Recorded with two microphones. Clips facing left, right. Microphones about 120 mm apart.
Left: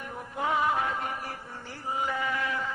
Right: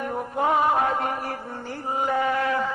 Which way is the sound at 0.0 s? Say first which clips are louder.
Right 8 dB; 60° right (ahead or behind).